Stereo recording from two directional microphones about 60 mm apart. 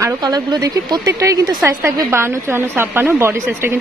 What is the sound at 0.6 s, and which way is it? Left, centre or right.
Speech, right.